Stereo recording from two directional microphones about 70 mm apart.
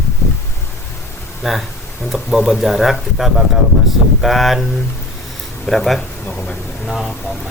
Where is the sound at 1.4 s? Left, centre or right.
Centre.